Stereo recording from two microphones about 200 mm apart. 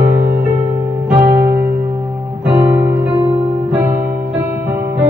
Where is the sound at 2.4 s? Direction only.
5° right (ahead or behind).